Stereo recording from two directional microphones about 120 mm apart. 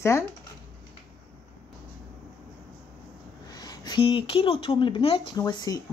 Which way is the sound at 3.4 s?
35° left (ahead or behind).